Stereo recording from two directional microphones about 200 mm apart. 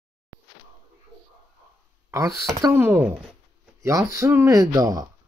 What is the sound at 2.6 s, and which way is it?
Speech, 10° right (ahead or behind).